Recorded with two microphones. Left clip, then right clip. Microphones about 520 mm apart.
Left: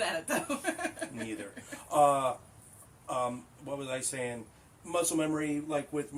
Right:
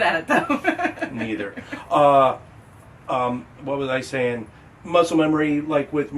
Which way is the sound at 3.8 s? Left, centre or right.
Left.